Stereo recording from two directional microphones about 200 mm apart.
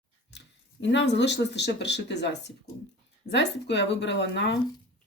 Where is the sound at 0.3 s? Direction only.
60° left (ahead or behind).